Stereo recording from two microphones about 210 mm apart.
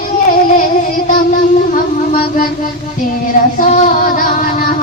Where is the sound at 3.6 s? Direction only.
40° left (ahead or behind).